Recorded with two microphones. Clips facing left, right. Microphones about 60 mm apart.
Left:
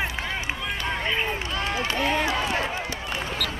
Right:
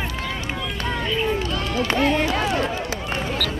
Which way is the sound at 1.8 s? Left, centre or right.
Right.